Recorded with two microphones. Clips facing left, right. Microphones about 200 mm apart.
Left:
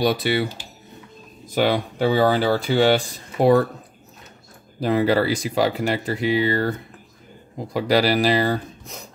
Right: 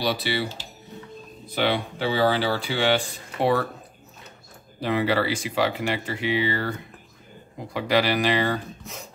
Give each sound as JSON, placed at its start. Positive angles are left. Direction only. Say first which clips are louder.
{"t": 0.0, "sound": "speech", "louder": "left 5 dB", "side_deg": 50}
{"t": 1.5, "sound": "speech", "louder": "left 4 dB", "side_deg": 45}
{"t": 4.7, "sound": "speech", "louder": "left 4 dB", "side_deg": 40}
{"t": 7.7, "sound": "speech", "louder": "left 4 dB", "side_deg": 40}